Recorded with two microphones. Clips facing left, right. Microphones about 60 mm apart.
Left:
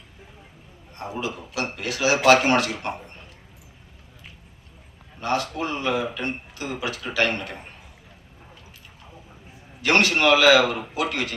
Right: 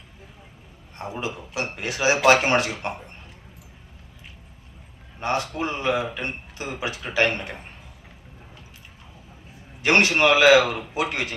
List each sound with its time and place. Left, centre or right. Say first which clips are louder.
0.9 s speech: left 1 dB; right
5.2 s speech: even; right
9.8 s speech: right 1 dB; right